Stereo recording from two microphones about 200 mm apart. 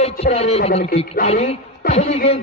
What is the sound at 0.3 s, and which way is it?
Speech, 30° left (ahead or behind).